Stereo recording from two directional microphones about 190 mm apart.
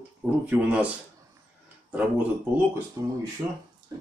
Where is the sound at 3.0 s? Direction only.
15° right (ahead or behind).